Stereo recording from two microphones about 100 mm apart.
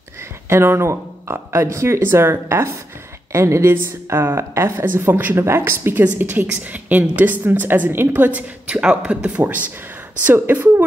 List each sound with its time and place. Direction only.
0.5 s a woman's voice: 25° right (ahead or behind)